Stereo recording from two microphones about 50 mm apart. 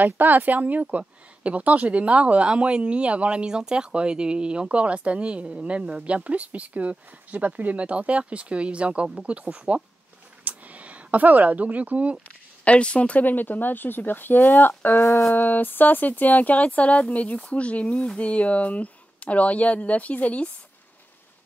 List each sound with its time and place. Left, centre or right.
0.0 s speech: right
12.6 s speech: left
13.2 s speech: left